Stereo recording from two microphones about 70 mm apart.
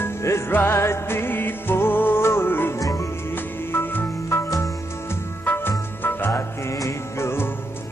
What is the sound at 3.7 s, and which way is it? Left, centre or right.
Music, left.